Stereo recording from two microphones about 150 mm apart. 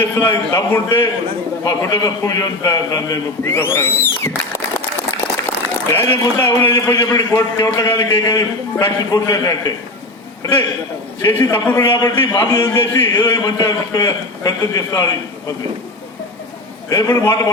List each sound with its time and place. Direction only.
0.0 s a man's voice: 20° left (ahead or behind)
5.9 s a man's voice: 15° left (ahead or behind)
11.2 s a man's voice: 20° left (ahead or behind)
12.5 s a man's voice: 30° left (ahead or behind)
12.8 s a man's voice: 20° left (ahead or behind)
16.9 s a man's voice: 25° left (ahead or behind)